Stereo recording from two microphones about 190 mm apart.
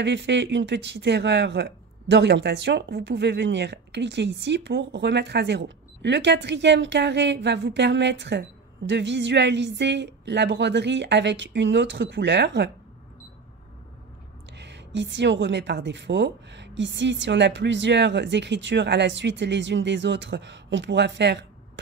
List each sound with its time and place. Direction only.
0.0 s speech: 65° right (ahead or behind)
14.6 s a woman's voice: 65° right (ahead or behind)